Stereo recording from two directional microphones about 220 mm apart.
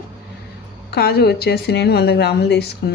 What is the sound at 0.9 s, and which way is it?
Speech, 45° left (ahead or behind).